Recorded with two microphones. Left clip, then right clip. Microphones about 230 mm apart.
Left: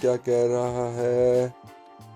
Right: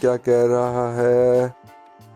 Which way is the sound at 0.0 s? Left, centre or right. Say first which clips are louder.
Right 5 dB; right.